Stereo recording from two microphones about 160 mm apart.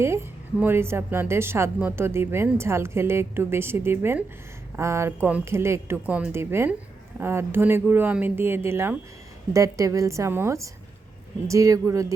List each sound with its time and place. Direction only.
0.0 s a woman's voice: 15° right (ahead or behind)